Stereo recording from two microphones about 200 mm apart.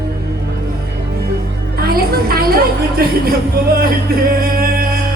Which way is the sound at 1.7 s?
50° right (ahead or behind).